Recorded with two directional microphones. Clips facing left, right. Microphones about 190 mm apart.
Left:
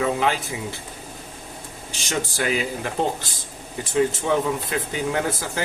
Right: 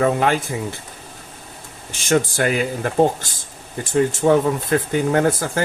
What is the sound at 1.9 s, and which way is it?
Speech, 50° right (ahead or behind).